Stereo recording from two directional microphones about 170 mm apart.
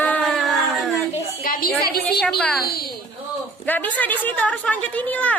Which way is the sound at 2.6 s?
65° left (ahead or behind).